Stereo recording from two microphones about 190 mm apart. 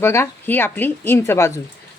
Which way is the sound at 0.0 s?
15° left (ahead or behind).